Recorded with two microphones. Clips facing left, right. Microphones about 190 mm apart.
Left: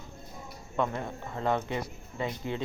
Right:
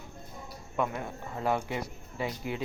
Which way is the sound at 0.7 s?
10° right (ahead or behind).